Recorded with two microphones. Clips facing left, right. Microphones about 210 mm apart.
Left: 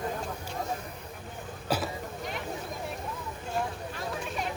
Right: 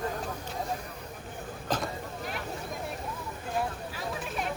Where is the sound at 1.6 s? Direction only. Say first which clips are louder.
Left 1 dB; 10° left (ahead or behind).